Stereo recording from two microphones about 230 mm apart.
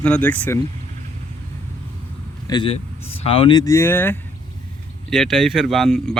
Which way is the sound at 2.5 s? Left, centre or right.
Left.